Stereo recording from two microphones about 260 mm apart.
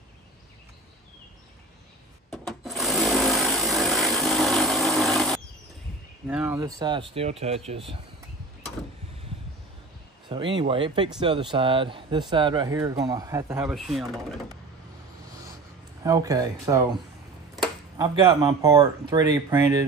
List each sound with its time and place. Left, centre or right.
2.3 s sewing machine: centre
6.2 s speech: centre; by 7.8 s right
10.2 s speech: centre
16.0 s speech: centre
17.9 s speech: centre